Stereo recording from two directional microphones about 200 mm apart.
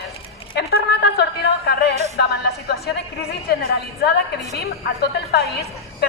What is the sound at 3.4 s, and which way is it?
A woman's voice, 55° left (ahead or behind).